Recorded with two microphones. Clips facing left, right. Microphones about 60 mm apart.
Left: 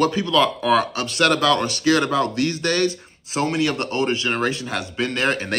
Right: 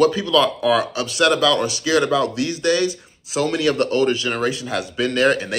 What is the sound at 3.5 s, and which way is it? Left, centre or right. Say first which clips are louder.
Speech: right 5 dB; left.